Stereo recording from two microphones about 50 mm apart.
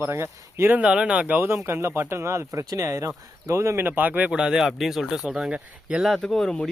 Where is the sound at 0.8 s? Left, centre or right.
Centre.